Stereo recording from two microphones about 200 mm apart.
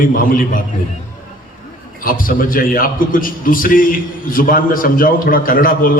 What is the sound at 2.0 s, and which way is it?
A man's voice, 45° left (ahead or behind).